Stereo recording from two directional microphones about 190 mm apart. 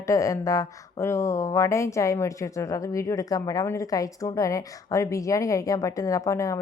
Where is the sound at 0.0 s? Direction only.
15° left (ahead or behind).